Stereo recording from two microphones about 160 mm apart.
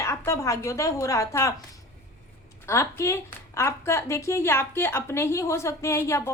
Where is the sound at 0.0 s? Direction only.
20° left (ahead or behind).